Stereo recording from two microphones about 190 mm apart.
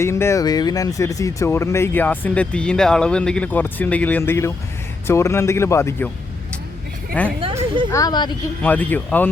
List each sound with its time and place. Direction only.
0.0 s speech: 15° left (ahead or behind)
7.1 s speech: 5° left (ahead or behind)
7.4 s a sound: 30° right (ahead or behind)
7.9 s speech: 20° left (ahead or behind)
8.6 s speech: 10° left (ahead or behind)